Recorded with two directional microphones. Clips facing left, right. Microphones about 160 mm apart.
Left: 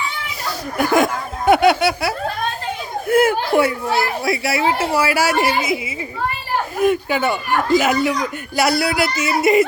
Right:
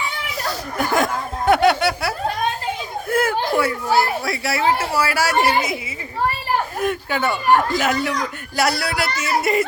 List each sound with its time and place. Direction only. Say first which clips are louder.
0.8 s a woman's voice: left 4 dB; 15° left (ahead or behind)
6.8 s a woman's voice: left 9 dB; 10° left (ahead or behind)